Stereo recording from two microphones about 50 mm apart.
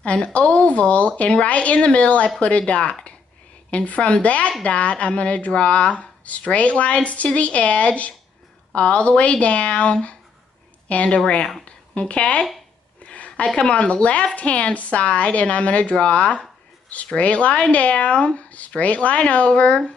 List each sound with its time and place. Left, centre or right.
0.0 s a woman's voice: left
11.1 s speech: centre
13.0 s a sound: left
13.6 s speech: left